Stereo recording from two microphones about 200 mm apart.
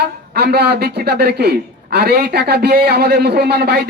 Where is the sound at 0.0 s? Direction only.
50° right (ahead or behind).